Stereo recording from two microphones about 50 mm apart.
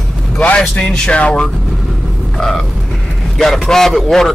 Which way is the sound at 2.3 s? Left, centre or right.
Centre.